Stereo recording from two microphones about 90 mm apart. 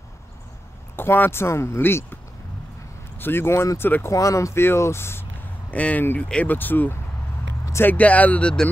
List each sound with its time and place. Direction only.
0.9 s speech: 25° left (ahead or behind)
3.2 s speech: 25° left (ahead or behind)
4.1 s speech: 35° left (ahead or behind)
5.7 s speech: 15° left (ahead or behind)